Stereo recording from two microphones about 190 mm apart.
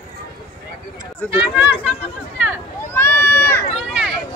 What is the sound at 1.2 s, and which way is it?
Speech, 10° left (ahead or behind).